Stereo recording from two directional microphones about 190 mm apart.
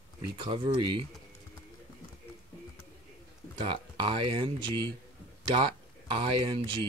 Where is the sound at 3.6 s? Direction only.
25° right (ahead or behind).